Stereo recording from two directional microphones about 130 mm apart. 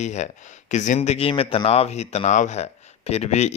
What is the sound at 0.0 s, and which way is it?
Speech, 65° left (ahead or behind).